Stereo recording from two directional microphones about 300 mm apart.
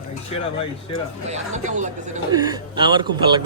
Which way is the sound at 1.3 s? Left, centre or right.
Right.